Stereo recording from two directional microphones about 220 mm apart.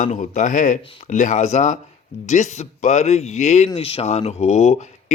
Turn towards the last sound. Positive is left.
turn(degrees=30)  # may be behind; listen again after turning